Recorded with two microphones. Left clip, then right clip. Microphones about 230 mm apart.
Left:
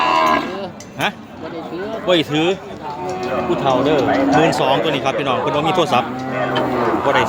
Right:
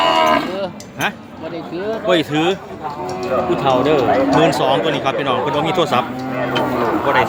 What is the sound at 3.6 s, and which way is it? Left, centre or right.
Speech, centre.